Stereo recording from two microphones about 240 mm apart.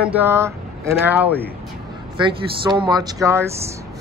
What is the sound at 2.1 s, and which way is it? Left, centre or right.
Speech, centre.